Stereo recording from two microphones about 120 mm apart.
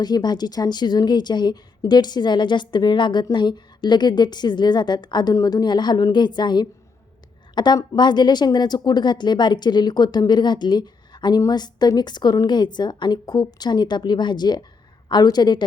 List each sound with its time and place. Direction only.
0.0 s a woman's voice: 35° left (ahead or behind)